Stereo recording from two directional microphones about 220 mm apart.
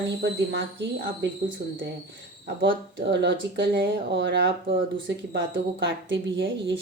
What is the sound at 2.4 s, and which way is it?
A woman's voice, 50° right (ahead or behind).